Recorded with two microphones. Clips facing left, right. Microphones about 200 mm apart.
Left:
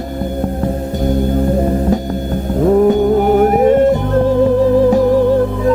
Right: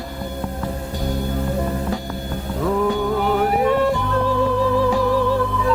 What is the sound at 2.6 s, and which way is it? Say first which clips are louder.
Music: left 9 dB; 40° left (ahead or behind).